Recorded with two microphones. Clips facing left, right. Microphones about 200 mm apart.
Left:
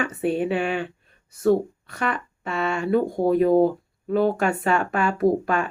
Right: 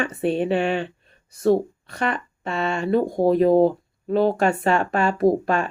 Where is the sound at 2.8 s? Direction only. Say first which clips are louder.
Right 1 dB; 5° left (ahead or behind).